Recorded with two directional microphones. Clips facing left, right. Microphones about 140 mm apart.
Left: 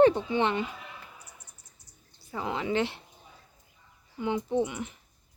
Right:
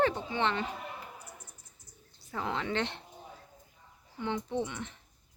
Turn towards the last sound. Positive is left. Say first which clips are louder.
# left 6 dB
turn(degrees=10)  # may be behind; listen again after turning